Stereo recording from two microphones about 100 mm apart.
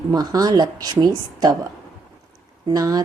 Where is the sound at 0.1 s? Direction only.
40° right (ahead or behind).